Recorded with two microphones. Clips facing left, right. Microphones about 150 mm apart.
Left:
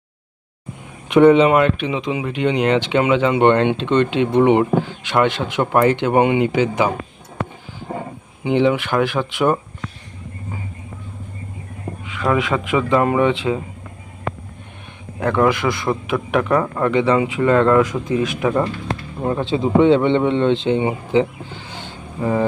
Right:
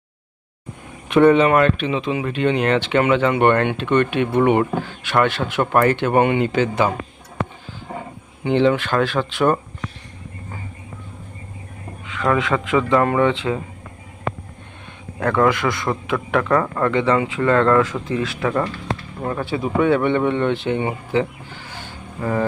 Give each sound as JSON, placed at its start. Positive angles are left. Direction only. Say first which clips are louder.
{"t": 1.0, "sound": "speech", "louder": "left 2 dB", "side_deg": 15}
{"t": 8.4, "sound": "speech", "louder": "even", "side_deg": 15}
{"t": 12.0, "sound": "speech", "louder": "even", "side_deg": 15}
{"t": 15.2, "sound": "speech", "louder": "left 1 dB", "side_deg": 15}